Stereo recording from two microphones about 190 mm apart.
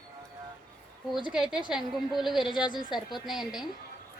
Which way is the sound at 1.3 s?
5° right (ahead or behind).